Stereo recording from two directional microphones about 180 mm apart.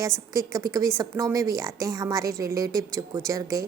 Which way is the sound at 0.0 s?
20° right (ahead or behind).